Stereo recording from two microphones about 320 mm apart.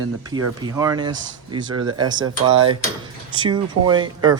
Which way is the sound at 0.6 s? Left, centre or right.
Centre.